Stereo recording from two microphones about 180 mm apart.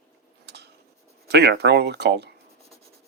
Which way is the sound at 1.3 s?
65° right (ahead or behind).